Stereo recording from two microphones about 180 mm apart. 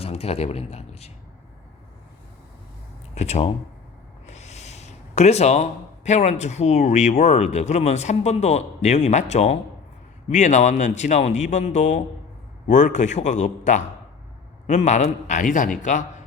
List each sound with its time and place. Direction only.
0.0 s speech: 35° left (ahead or behind)
3.2 s a man's voice: 35° left (ahead or behind)